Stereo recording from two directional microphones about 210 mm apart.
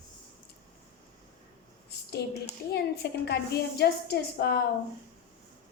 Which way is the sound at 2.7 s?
50° left (ahead or behind).